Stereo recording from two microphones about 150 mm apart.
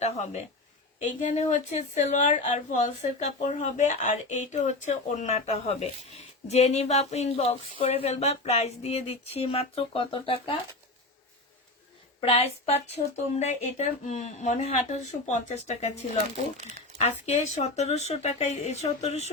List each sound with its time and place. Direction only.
0.0 s speech: 50° left (ahead or behind)
12.2 s speech: 40° left (ahead or behind)
17.0 s speech: 50° left (ahead or behind)